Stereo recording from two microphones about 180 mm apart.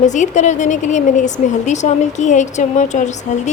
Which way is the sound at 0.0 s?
40° left (ahead or behind).